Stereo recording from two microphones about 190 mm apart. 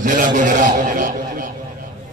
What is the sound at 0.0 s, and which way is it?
A man's voice, 45° right (ahead or behind).